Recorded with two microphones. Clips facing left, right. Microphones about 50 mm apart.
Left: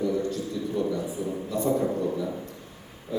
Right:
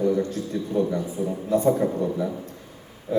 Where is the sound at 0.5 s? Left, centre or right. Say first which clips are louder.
Right 2 dB; right.